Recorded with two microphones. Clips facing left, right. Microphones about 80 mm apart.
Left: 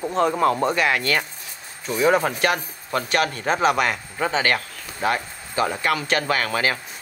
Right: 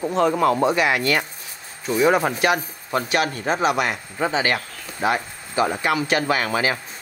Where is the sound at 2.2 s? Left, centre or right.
Right.